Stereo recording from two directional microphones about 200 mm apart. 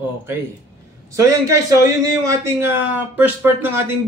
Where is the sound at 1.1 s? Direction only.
15° right (ahead or behind).